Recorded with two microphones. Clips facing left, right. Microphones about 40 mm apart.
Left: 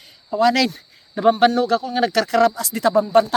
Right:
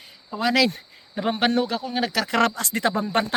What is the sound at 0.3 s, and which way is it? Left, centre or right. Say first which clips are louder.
Speech: left 4 dB; centre.